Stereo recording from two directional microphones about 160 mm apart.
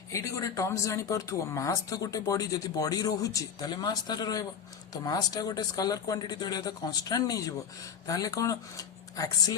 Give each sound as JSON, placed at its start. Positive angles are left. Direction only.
{"t": 0.1, "sound": "speech", "side_deg": 20}